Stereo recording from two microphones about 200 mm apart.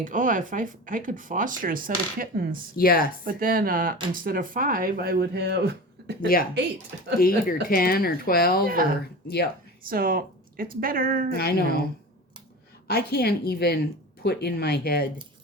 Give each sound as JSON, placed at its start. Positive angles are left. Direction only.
{"t": 0.0, "sound": "speech", "side_deg": -40}
{"t": 2.7, "sound": "speech", "side_deg": 45}
{"t": 3.2, "sound": "speech", "side_deg": -45}
{"t": 7.2, "sound": "speech", "side_deg": 45}
{"t": 8.6, "sound": "speech", "side_deg": -45}
{"t": 9.2, "sound": "speech", "side_deg": 55}
{"t": 9.9, "sound": "speech", "side_deg": -45}
{"t": 11.3, "sound": "speech", "side_deg": 50}
{"t": 12.9, "sound": "speech", "side_deg": 50}